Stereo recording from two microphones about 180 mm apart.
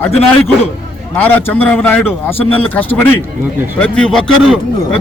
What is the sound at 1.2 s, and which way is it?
A man's voice, 10° left (ahead or behind).